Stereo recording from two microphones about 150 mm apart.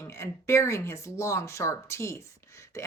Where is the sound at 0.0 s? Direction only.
20° left (ahead or behind).